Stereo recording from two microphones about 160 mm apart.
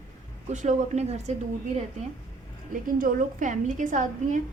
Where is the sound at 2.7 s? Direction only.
55° right (ahead or behind).